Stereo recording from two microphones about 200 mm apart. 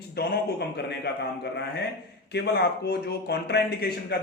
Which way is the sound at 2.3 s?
55° left (ahead or behind).